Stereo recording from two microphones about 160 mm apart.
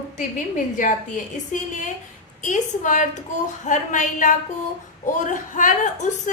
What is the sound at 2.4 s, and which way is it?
A woman's voice, 50° left (ahead or behind).